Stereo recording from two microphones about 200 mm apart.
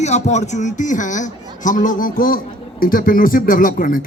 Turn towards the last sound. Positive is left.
turn(degrees=45)  # may be behind; listen again after turning